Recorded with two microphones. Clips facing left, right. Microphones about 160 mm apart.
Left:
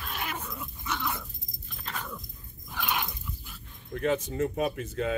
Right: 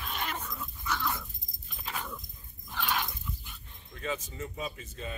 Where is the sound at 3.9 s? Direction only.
60° left (ahead or behind); by 5.2 s 90° left.